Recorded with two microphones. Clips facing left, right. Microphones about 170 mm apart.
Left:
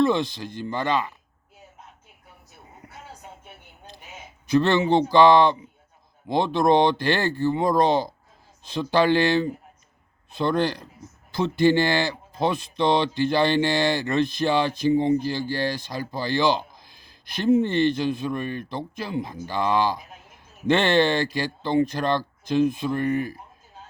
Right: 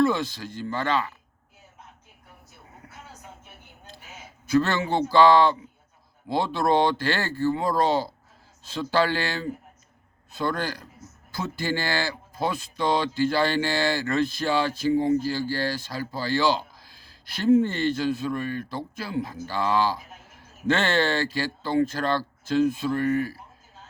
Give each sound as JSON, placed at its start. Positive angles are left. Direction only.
{"t": 0.0, "sound": "speech", "side_deg": 20}
{"t": 4.4, "sound": "speech", "side_deg": 20}